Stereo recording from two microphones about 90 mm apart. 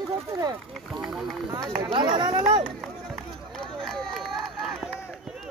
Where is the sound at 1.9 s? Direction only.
60° right (ahead or behind).